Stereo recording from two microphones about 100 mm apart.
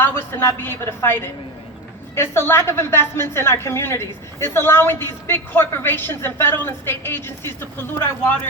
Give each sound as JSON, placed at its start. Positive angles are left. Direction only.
{"t": 0.0, "sound": "a woman's voice", "side_deg": 25}